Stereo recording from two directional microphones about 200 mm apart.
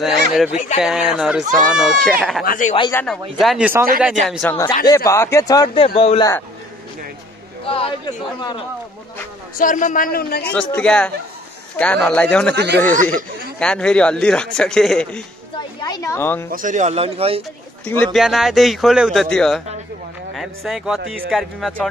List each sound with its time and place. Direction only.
0.5 s speech: 35° left (ahead or behind)
0.7 s speech: 5° right (ahead or behind)
2.4 s speech: 45° left (ahead or behind)
2.9 s speech: 10° left (ahead or behind)
3.3 s speech: 5° right (ahead or behind)
4.4 s a man's voice: 10° left (ahead or behind); by 6.3 s 25° left (ahead or behind)
7.6 s a man's voice: 25° left (ahead or behind)
9.6 s speech: 40° left (ahead or behind)
10.5 s speech: 5° left (ahead or behind)
12.5 s speech: 55° right (ahead or behind)
13.1 s speech: 5° left (ahead or behind)
15.8 s speech: 20° left (ahead or behind)
16.5 s a man's voice: 40° right (ahead or behind)
17.8 s speech: 5° left (ahead or behind)